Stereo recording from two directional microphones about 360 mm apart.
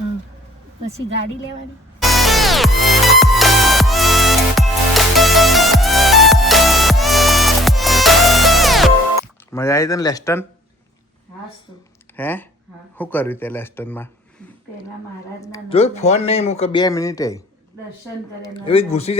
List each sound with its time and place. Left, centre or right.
2.0 s music: centre
9.5 s speech: centre
12.1 s speech: centre
15.4 s speech: centre
18.4 s speech: centre